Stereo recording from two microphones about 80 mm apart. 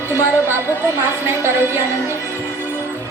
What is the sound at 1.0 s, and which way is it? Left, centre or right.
Speech, right.